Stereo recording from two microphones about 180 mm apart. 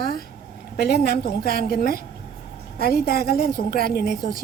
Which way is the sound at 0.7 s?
60° left (ahead or behind).